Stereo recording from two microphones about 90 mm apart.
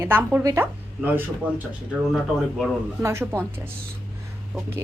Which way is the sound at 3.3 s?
25° right (ahead or behind).